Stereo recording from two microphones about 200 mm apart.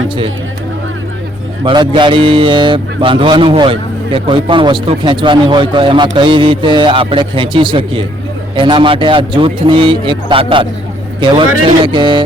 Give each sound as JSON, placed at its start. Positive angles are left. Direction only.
{"t": 1.6, "sound": "speech", "side_deg": -25}